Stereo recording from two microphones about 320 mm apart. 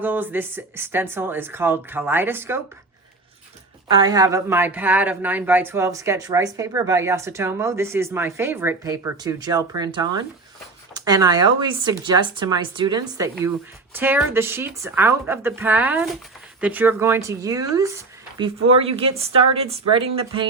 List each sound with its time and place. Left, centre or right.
0.0 s speech: centre
3.8 s speech: centre